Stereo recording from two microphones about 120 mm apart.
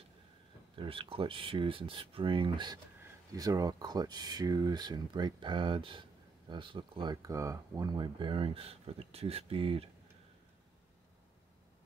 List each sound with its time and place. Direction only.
0.8 s speech: 50° right (ahead or behind)
3.0 s speech: 30° right (ahead or behind); by 9.8 s 50° right (ahead or behind)